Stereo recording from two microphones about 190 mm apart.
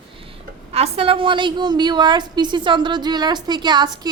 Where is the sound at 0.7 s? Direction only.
30° right (ahead or behind).